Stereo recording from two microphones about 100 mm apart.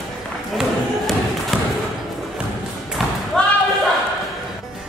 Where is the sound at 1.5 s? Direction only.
Centre (ahead or behind).